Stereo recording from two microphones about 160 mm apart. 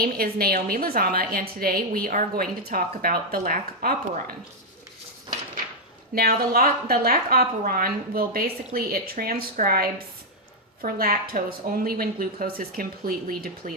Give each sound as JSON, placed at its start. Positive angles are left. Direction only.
{"t": 0.0, "sound": "a woman's voice", "side_deg": -70}
{"t": 6.1, "sound": "a woman's voice", "side_deg": -70}